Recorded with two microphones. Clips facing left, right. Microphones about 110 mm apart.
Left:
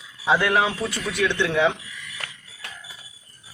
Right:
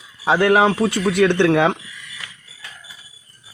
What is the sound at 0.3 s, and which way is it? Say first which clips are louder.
Speech: right 6 dB; 55° right (ahead or behind).